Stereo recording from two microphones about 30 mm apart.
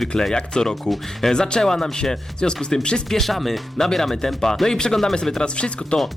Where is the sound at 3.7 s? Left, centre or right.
Centre.